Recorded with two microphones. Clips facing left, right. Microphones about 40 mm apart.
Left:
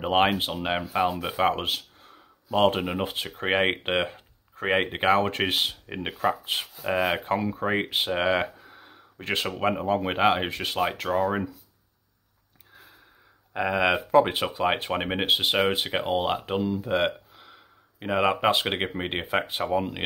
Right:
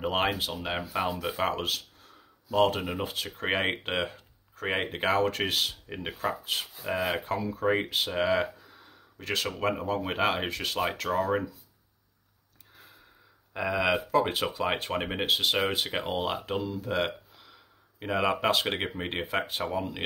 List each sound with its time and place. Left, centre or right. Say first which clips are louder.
0.0 s speech: left 5 dB; left
0.7 s speech: left 5 dB; centre
9.6 s speech: left 6 dB; centre
13.5 s speech: left 3 dB; left